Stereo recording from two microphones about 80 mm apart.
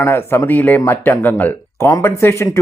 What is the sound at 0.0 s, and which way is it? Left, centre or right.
Speech, left.